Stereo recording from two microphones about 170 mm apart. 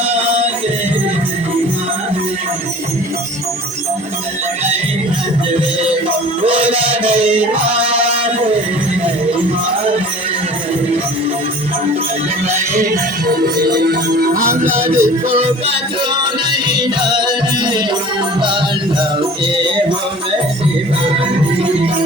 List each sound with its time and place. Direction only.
0.1 s music: 35° right (ahead or behind)
6.6 s music: 35° right (ahead or behind)
12.5 s music: 50° right (ahead or behind)
14.6 s music: 15° right (ahead or behind)
14.9 s music: 40° right (ahead or behind)